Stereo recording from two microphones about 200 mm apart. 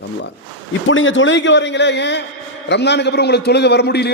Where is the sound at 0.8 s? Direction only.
75° left (ahead or behind); by 4.1 s 55° left (ahead or behind).